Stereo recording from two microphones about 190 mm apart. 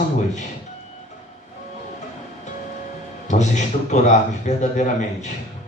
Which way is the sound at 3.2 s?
40° left (ahead or behind).